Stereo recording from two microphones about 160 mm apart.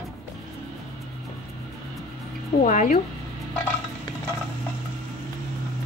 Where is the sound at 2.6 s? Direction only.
50° left (ahead or behind).